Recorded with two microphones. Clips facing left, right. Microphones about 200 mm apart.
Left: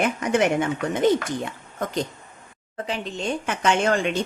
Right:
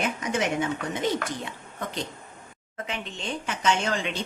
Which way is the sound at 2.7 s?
35° left (ahead or behind).